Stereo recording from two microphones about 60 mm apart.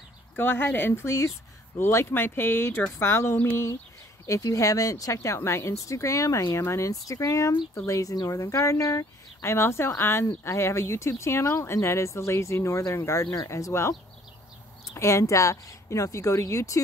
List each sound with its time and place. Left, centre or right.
0.4 s speech: left
1.0 s speech: left
4.3 s speech: left
6.5 s speech: left
6.9 s speech: left
10.5 s speech: left
15.0 s speech: left